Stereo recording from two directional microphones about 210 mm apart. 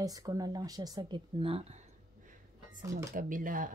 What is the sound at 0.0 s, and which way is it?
Speech, 15° right (ahead or behind).